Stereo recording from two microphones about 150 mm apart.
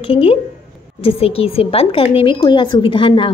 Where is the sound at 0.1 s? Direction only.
40° left (ahead or behind).